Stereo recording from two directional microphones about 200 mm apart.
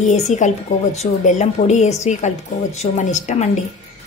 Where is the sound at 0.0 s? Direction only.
35° left (ahead or behind).